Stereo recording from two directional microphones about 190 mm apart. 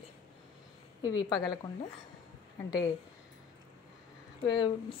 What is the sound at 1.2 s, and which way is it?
Speech, 25° left (ahead or behind).